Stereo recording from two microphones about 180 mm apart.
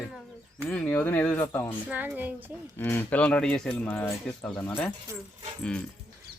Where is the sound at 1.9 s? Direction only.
10° right (ahead or behind).